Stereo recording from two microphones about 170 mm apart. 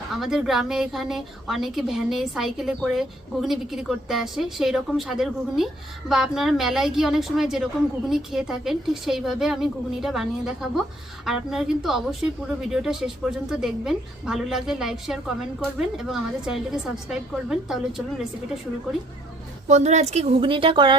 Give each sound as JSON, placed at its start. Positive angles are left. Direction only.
{"t": 0.1, "sound": "a woman's voice", "side_deg": 0}
{"t": 19.6, "sound": "speech", "side_deg": -40}